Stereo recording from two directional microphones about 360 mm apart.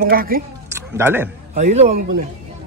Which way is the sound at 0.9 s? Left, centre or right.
Centre.